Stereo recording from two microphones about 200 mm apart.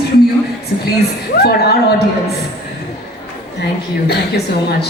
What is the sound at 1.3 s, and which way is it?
Speech, 55° left (ahead or behind).